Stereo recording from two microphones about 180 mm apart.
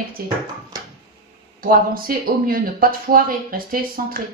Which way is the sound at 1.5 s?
50° right (ahead or behind).